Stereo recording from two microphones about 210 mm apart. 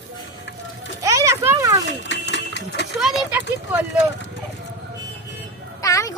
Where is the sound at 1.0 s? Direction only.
15° right (ahead or behind).